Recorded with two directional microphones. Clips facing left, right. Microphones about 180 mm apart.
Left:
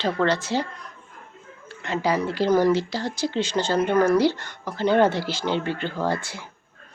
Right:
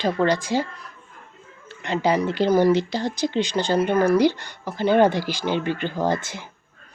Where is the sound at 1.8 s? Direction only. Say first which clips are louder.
Right 2 dB; 20° right (ahead or behind).